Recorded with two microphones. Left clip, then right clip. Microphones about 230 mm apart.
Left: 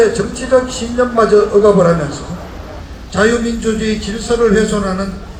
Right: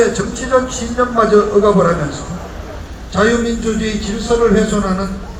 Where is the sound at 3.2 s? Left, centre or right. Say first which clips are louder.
Left 1 dB; left.